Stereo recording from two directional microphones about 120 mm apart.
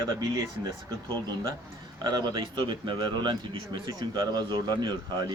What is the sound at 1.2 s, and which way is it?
Speech, 30° right (ahead or behind).